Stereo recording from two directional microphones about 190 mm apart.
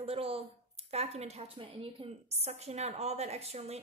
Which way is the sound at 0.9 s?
35° right (ahead or behind).